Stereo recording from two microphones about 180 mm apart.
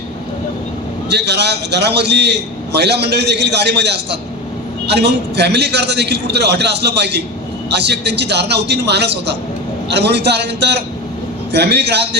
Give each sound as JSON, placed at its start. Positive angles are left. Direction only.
{"t": 1.1, "sound": "a man's voice", "side_deg": -70}